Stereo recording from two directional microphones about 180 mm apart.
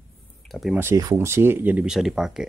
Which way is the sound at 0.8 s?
15° right (ahead or behind).